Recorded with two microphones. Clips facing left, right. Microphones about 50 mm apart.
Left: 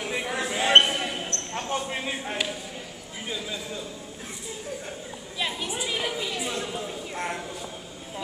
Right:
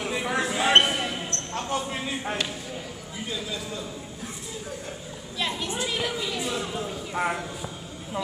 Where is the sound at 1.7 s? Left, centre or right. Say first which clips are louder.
Even; centre.